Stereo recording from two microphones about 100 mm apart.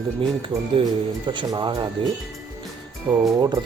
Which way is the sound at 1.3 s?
50° right (ahead or behind).